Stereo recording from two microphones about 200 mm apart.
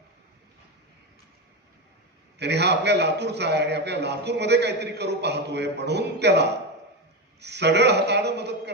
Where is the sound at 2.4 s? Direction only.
55° right (ahead or behind).